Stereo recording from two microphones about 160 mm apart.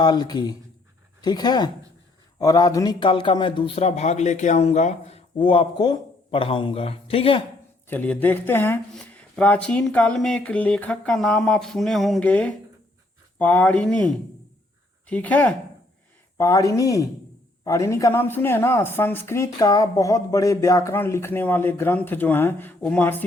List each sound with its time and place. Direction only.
0.0 s a man's voice: 25° left (ahead or behind)
7.9 s a woman's voice: 10° left (ahead or behind)
16.4 s a woman's voice: 20° left (ahead or behind)